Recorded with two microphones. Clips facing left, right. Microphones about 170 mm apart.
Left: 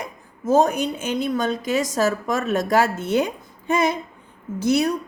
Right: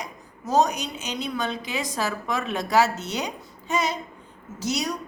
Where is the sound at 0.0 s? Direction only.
50° left (ahead or behind).